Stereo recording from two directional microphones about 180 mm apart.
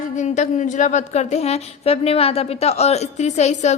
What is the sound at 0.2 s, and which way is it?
A woman's voice, 40° left (ahead or behind).